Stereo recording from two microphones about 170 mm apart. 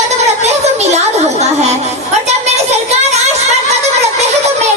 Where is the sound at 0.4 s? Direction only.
40° right (ahead or behind).